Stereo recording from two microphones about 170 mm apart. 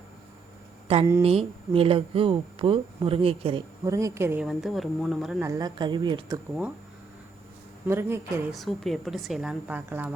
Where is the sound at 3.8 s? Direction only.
20° right (ahead or behind).